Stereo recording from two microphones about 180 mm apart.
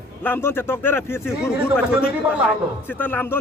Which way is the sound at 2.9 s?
10° left (ahead or behind).